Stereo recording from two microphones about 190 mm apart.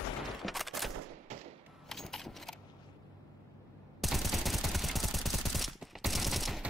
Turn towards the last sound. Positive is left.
turn(degrees=0)  # may be behind; listen again after turning